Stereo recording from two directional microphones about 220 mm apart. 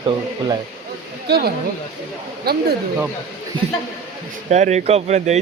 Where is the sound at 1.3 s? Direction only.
45° right (ahead or behind).